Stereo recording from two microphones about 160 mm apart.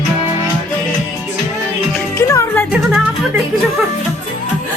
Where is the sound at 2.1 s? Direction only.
15° left (ahead or behind).